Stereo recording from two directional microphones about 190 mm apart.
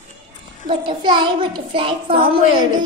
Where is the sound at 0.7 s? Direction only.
25° right (ahead or behind).